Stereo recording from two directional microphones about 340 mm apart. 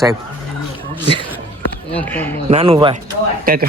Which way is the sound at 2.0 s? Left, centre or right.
Centre.